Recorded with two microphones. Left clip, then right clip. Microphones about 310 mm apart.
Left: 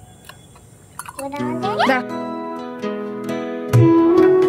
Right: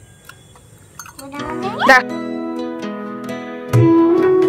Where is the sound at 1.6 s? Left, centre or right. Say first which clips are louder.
Right 6 dB; centre.